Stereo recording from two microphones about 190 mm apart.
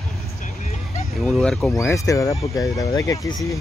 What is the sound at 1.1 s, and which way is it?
Speech, centre (ahead or behind).